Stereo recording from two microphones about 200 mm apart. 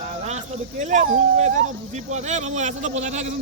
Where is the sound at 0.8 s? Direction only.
35° right (ahead or behind).